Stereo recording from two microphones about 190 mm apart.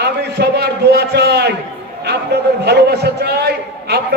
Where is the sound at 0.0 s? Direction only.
60° right (ahead or behind).